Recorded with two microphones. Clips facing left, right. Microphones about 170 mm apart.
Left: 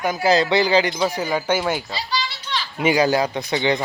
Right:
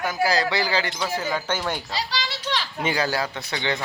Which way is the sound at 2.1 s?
90° right.